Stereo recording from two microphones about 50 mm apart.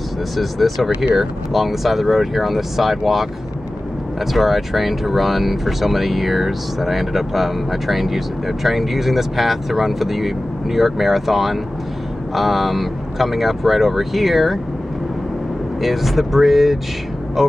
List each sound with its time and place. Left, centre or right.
0.4 s speech: centre
4.3 s speech: centre
15.8 s speech: centre